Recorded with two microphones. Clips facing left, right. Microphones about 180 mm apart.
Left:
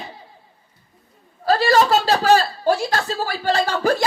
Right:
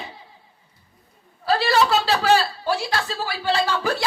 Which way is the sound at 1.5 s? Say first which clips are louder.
Left 3 dB; 40° left (ahead or behind).